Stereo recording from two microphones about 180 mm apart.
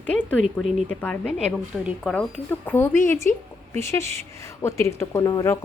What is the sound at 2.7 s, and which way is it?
A woman's voice, 15° left (ahead or behind).